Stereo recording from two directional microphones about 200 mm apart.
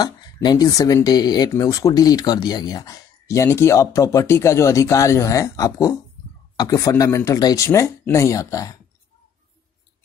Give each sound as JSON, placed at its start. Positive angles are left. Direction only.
{"t": 0.0, "sound": "speech", "side_deg": 20}